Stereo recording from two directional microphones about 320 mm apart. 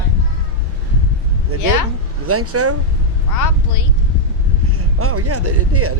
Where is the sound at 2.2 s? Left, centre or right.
Right.